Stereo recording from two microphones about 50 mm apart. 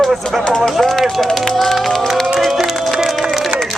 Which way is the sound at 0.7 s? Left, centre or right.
Centre.